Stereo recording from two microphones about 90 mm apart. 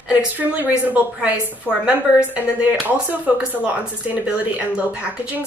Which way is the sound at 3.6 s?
15° right (ahead or behind).